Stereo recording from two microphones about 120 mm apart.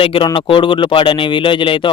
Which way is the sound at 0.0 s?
45° left (ahead or behind).